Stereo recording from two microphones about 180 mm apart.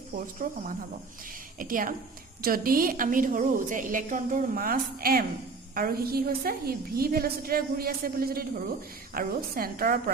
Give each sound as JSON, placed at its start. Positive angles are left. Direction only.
{"t": 0.4, "sound": "a woman's voice", "side_deg": -50}